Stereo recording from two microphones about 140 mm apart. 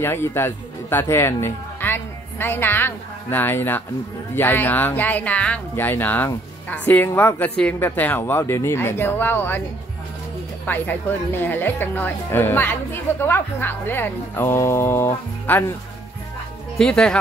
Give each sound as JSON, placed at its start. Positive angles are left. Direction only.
{"t": 0.0, "sound": "speech", "side_deg": 15}
{"t": 10.6, "sound": "speech", "side_deg": 15}
{"t": 16.7, "sound": "speech", "side_deg": 5}